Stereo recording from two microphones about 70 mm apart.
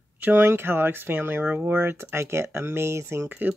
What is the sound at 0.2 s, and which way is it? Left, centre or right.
Speech, right.